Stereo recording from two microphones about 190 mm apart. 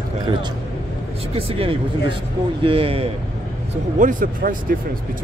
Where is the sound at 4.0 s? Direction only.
45° right (ahead or behind).